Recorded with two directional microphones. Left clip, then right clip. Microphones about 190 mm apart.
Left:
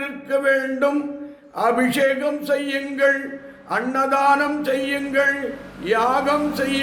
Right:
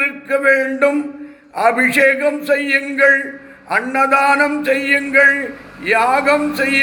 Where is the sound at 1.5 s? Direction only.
10° right (ahead or behind).